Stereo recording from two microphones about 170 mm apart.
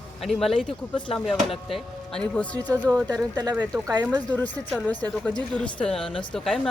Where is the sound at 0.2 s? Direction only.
Centre (ahead or behind).